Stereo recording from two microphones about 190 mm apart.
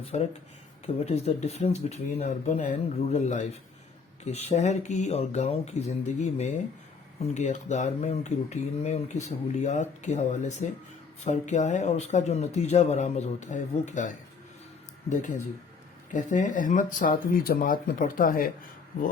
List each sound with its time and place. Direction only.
0.1 s speech: 35° left (ahead or behind)